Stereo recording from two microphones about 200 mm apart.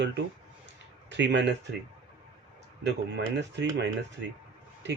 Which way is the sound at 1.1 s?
60° right (ahead or behind).